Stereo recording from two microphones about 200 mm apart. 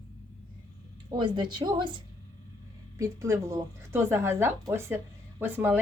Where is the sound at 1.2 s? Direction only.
20° right (ahead or behind).